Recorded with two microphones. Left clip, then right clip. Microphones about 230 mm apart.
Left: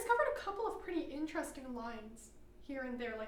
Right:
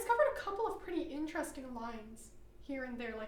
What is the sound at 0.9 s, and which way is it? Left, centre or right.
A woman's voice, right.